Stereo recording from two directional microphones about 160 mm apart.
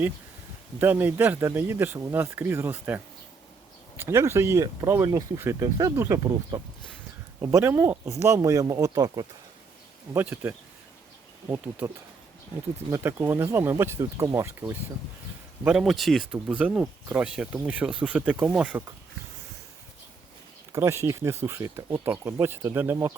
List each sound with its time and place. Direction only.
0.8 s speech: 10° right (ahead or behind)
10.2 s speech: 15° right (ahead or behind)
12.9 s speech: 15° right (ahead or behind)
15.6 s speech: 5° right (ahead or behind)
20.7 s speech: 15° right (ahead or behind)